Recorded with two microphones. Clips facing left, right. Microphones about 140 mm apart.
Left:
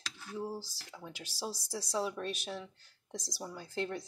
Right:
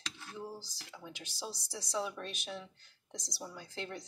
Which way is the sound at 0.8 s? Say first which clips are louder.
Left 1 dB; centre (ahead or behind).